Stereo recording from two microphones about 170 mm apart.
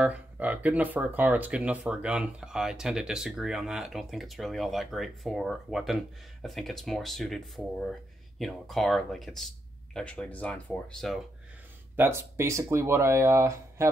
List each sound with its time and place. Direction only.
0.0 s speech: 10° right (ahead or behind)
11.9 s speech: 15° right (ahead or behind)